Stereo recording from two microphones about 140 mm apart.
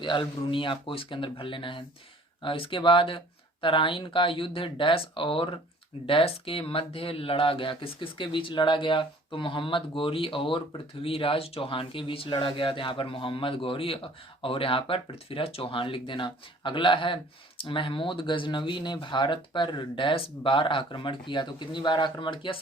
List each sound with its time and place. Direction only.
0.0 s speech: 35° left (ahead or behind)